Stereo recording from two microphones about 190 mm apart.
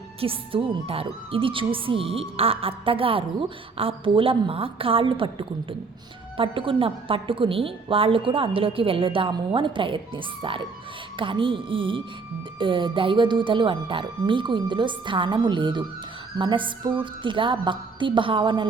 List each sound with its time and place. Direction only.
0.2 s a woman's voice: 30° right (ahead or behind)